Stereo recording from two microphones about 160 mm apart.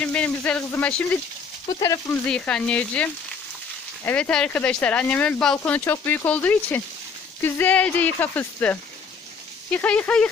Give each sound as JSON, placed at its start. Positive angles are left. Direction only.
{"t": 0.0, "sound": "speech", "side_deg": 5}
{"t": 1.8, "sound": "speech", "side_deg": 20}
{"t": 2.2, "sound": "speech", "side_deg": 5}